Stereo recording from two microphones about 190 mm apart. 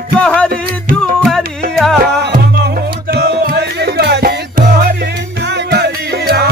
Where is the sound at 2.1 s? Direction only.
60° right (ahead or behind).